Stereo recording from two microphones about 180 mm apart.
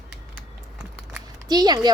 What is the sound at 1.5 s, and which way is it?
Speech, 20° right (ahead or behind).